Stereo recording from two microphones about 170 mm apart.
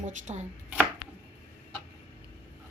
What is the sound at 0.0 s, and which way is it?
Speech, 45° right (ahead or behind).